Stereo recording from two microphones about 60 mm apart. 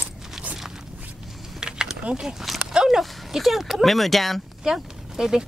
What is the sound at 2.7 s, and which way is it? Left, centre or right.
Speech, centre.